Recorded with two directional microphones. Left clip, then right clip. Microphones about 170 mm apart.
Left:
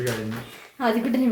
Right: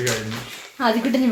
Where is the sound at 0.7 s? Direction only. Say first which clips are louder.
Right 3 dB; 5° right (ahead or behind).